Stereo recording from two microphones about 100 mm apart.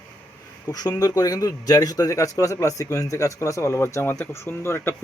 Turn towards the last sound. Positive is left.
turn(degrees=25)  # may be behind; listen again after turning